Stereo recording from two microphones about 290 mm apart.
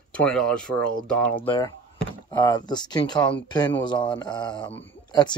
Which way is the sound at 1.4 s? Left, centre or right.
Centre.